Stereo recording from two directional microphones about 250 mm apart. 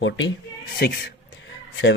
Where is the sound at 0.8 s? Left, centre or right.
Left.